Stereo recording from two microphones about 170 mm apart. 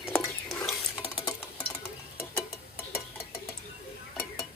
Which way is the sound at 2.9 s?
15° left (ahead or behind).